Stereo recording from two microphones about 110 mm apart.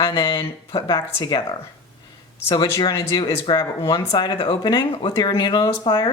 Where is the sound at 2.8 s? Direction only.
35° left (ahead or behind).